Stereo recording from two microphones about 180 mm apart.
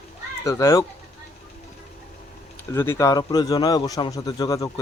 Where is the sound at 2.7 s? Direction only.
15° left (ahead or behind).